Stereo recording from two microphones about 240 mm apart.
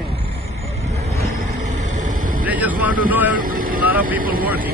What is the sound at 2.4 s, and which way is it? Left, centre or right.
Speech, centre.